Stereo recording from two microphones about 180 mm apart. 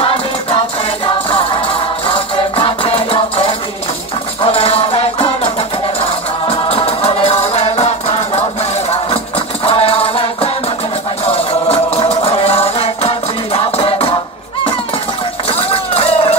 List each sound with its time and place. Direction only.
0.0 s music: 30° left (ahead or behind)
9.7 s music: 30° left (ahead or behind)
15.5 s a sound: 30° left (ahead or behind)